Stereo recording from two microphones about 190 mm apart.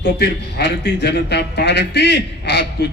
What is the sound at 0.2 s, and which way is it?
A man's voice, 60° left (ahead or behind).